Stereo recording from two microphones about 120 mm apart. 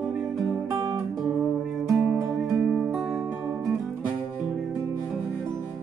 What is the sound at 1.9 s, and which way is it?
Music, 5° right (ahead or behind).